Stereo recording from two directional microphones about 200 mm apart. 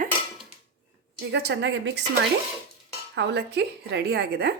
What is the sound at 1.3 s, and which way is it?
Speech, 60° right (ahead or behind).